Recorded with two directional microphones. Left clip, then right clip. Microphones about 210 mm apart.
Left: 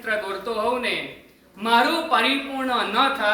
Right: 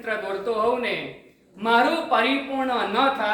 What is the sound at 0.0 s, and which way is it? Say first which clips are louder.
Speech: left 1 dB; 10° left (ahead or behind).